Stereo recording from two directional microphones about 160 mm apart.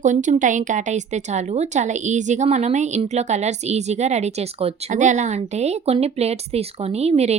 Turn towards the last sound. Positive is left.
turn(degrees=-40)  # may be behind; listen again after turning